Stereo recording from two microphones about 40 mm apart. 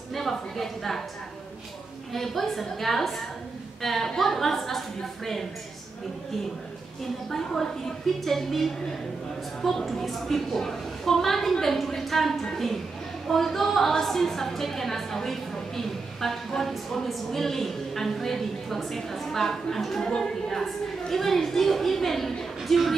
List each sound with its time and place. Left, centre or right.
0.1 s a woman's voice: centre
2.1 s a woman's voice: centre
7.2 s a woman's voice: centre